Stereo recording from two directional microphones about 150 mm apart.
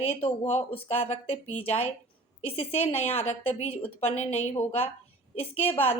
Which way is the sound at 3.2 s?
45° left (ahead or behind).